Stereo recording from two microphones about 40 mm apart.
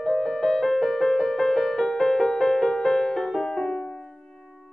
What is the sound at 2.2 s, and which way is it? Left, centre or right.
Music, centre.